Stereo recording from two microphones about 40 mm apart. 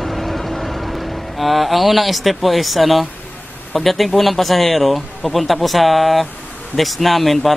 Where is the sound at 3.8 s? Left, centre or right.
Centre.